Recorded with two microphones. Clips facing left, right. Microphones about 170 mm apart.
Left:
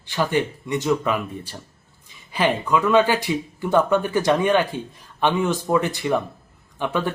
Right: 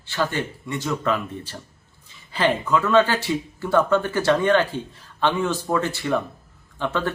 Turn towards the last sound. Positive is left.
turn(degrees=15)  # may be behind; listen again after turning